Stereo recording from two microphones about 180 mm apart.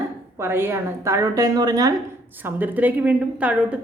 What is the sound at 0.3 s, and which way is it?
A woman's voice, 15° right (ahead or behind).